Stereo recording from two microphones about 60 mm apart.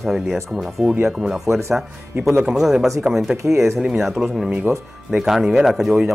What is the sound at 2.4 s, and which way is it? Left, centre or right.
Speech, centre.